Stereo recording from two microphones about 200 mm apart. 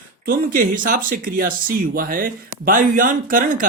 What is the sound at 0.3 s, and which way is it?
Speech, 45° right (ahead or behind).